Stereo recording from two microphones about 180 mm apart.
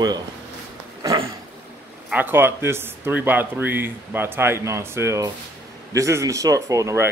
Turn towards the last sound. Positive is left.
turn(degrees=-20)  # may be behind; listen again after turning